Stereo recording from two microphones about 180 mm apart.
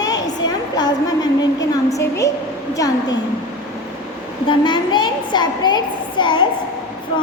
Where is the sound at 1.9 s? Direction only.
15° left (ahead or behind).